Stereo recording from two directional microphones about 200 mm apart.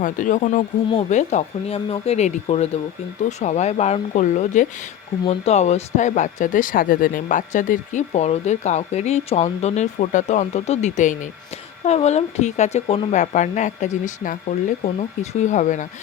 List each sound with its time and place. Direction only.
0.0 s speech: 40° left (ahead or behind)